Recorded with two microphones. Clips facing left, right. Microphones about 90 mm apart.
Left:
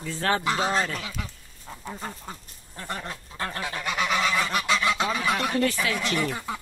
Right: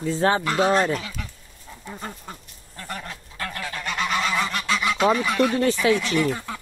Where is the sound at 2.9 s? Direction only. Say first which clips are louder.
Even; 25° left (ahead or behind).